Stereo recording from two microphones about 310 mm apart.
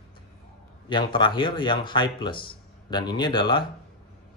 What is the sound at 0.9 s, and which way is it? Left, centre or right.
Speech, centre.